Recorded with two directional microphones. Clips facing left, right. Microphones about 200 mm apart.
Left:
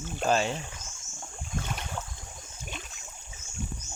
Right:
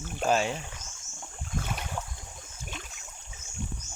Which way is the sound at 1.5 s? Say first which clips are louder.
Right 1 dB; centre (ahead or behind).